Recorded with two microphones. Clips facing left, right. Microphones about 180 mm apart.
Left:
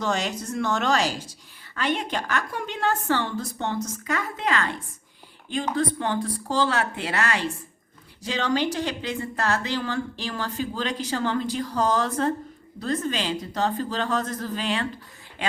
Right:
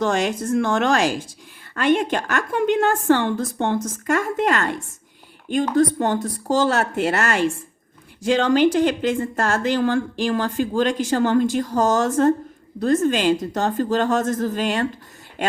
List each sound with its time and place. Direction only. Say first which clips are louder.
0.0 s a woman's voice: right 6 dB; 50° right (ahead or behind)